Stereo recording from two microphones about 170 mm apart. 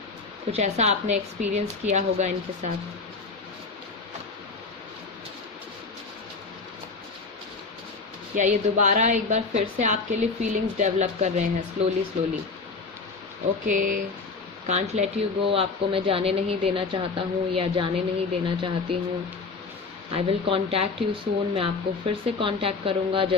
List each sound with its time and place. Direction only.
0.5 s a woman's voice: 40° right (ahead or behind)
8.4 s a woman's voice: 45° right (ahead or behind)
13.7 s a woman's voice: 50° right (ahead or behind)
14.7 s a woman's voice: 40° right (ahead or behind)
20.1 s a woman's voice: 35° right (ahead or behind)